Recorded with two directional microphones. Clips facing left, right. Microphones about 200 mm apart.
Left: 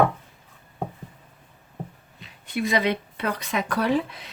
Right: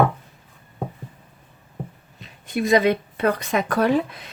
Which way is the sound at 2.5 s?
45° right (ahead or behind).